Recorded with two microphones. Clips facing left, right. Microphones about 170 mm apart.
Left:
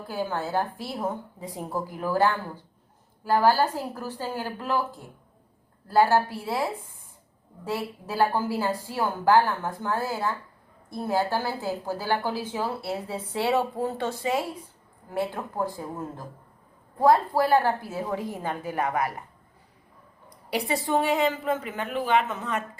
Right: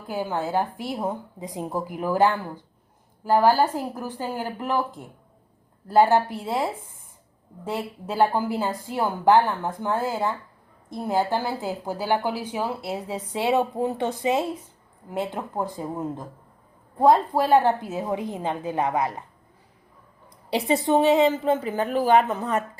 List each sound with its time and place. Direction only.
0.1 s a woman's voice: 15° right (ahead or behind)
20.7 s speech: 20° right (ahead or behind)